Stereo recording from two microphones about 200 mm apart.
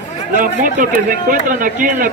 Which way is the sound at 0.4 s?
45° right (ahead or behind).